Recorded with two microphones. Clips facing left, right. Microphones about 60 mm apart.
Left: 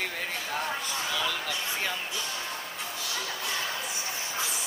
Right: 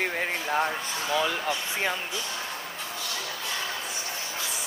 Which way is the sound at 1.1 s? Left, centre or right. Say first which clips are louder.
Right 8 dB; right.